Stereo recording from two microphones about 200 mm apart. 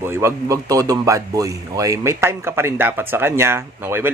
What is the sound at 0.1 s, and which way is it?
A man's voice, 15° right (ahead or behind).